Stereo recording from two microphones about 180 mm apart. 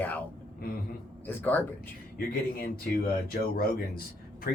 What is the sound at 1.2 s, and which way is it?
Speech, 10° left (ahead or behind).